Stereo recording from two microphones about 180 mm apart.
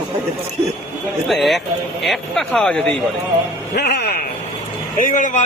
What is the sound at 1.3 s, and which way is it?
A man's voice, centre (ahead or behind).